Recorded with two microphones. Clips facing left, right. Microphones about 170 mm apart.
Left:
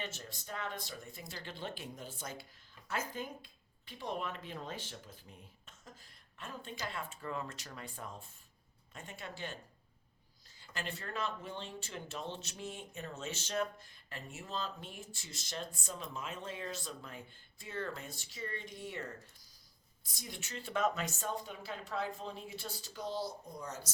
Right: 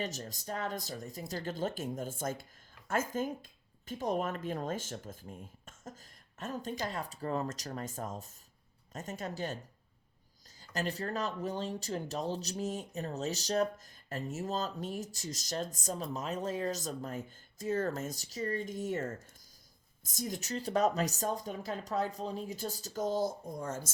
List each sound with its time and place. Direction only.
0.0 s speech: 40° right (ahead or behind)
10.6 s speech: 40° right (ahead or behind)